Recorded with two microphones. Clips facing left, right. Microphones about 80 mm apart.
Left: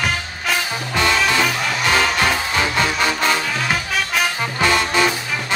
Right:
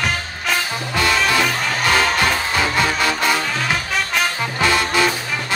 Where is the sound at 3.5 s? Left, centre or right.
Centre.